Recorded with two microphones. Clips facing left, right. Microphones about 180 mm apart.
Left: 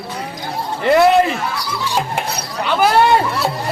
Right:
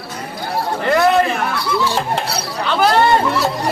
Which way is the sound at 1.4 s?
60° right (ahead or behind).